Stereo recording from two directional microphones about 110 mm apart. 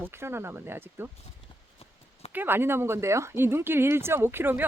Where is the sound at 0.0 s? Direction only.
20° right (ahead or behind).